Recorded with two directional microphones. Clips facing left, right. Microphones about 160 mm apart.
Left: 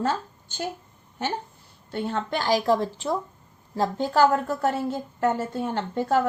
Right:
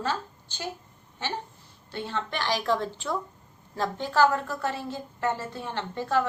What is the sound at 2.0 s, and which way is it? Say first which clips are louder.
A woman's voice: left 5 dB; 40° left (ahead or behind).